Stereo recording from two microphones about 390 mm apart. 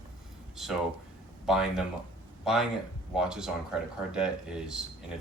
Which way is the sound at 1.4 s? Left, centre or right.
Centre.